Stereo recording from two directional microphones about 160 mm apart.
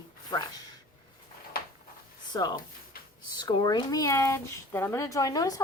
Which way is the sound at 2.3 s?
25° left (ahead or behind).